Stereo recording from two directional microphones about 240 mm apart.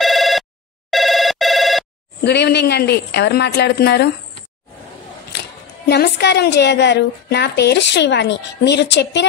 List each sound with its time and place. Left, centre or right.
0.0 s telephone bell ringing: centre
2.2 s a woman's voice: left
5.9 s a woman's voice: left